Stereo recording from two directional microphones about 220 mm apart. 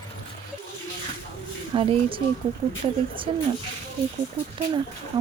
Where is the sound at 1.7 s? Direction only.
25° right (ahead or behind).